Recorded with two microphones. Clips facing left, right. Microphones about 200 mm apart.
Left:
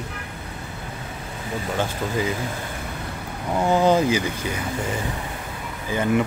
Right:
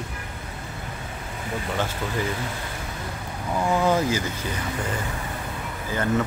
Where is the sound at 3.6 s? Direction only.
25° left (ahead or behind).